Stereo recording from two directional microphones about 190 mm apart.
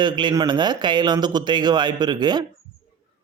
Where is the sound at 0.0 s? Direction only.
25° right (ahead or behind).